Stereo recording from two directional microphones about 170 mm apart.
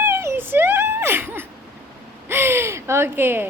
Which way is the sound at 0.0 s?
15° right (ahead or behind).